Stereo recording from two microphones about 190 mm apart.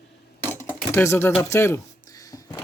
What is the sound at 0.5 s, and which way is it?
Typing, 10° left (ahead or behind).